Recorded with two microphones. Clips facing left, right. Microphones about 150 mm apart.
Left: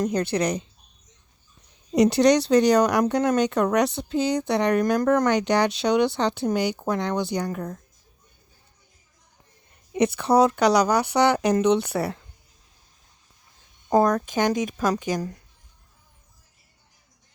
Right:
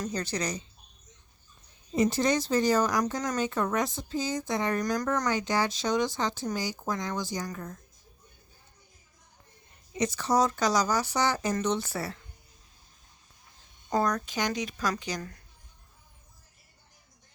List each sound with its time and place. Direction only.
0.0 s speech: 60° left (ahead or behind)
1.9 s speech: 75° left (ahead or behind); by 7.8 s 60° left (ahead or behind)
9.9 s speech: 60° left (ahead or behind)
13.9 s speech: 50° left (ahead or behind)